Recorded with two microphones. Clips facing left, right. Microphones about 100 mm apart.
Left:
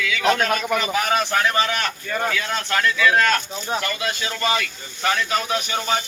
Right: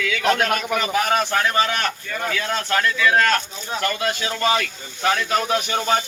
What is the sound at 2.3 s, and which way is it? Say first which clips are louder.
A man's voice: right 1 dB; 35° right (ahead or behind).